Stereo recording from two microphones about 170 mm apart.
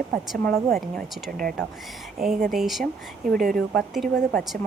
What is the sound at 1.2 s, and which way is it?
Speech, 60° right (ahead or behind).